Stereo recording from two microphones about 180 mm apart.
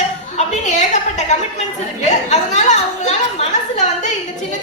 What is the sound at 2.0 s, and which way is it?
A woman's voice, 40° left (ahead or behind).